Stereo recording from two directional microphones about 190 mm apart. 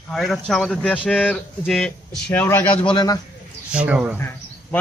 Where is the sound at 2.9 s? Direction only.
20° left (ahead or behind).